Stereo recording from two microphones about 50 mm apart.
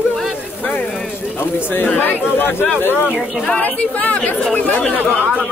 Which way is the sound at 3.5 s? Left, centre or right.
Left.